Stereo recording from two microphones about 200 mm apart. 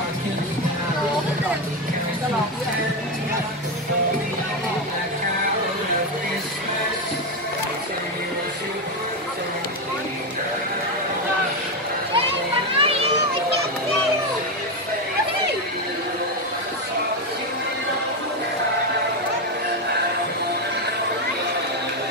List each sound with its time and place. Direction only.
12.7 s children playing: 30° right (ahead or behind)